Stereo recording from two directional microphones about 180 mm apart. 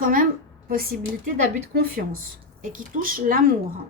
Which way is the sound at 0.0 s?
50° right (ahead or behind).